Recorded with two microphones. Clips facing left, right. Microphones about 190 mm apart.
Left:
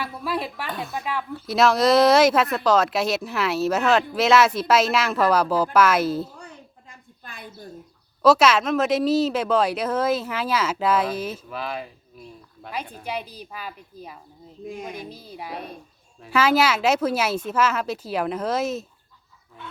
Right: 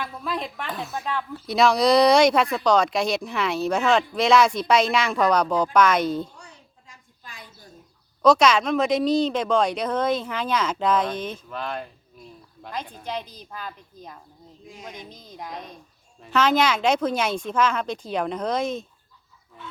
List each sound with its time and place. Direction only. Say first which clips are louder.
0.0 s speech: left 2 dB; 5° left (ahead or behind)
6.3 s a sound: left 6 dB; 55° left (ahead or behind)
8.2 s speech: even; 5° left (ahead or behind)